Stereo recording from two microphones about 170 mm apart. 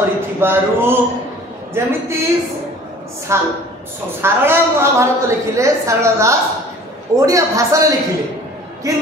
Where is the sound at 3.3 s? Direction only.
15° right (ahead or behind).